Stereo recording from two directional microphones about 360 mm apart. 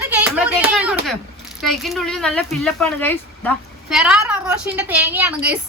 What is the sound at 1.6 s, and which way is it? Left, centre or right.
Speech, centre.